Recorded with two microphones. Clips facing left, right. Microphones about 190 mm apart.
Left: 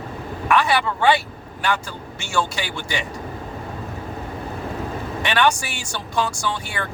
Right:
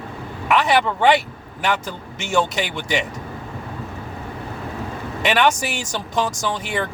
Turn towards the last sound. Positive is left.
turn(degrees=-20)  # may be behind; listen again after turning